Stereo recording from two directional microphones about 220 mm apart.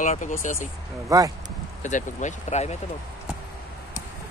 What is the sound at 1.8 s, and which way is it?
Speech, 35° left (ahead or behind).